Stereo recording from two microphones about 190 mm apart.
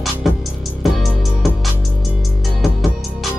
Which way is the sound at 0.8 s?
Centre (ahead or behind).